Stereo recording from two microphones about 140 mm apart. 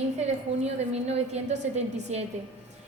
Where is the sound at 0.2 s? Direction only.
50° right (ahead or behind).